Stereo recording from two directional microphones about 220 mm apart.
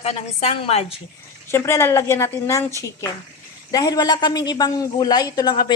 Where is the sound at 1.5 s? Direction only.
10° left (ahead or behind).